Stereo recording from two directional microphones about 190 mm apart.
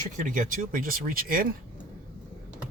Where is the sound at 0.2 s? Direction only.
40° right (ahead or behind).